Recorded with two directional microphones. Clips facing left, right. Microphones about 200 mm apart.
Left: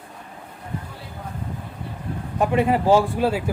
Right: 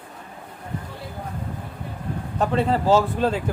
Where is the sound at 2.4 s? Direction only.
15° left (ahead or behind).